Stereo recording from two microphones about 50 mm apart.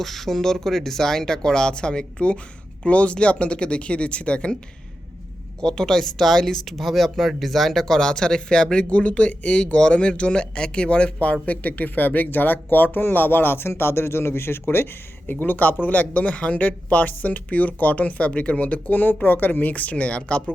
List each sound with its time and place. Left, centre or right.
0.0 s speech: centre; by 4.5 s left
5.5 s speech: centre; by 14.6 s left
15.3 s speech: left